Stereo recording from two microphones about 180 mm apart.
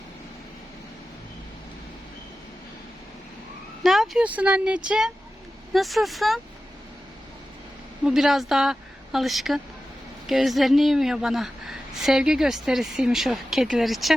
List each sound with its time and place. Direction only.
3.8 s a woman's voice: centre (ahead or behind)
8.0 s a woman's voice: centre (ahead or behind)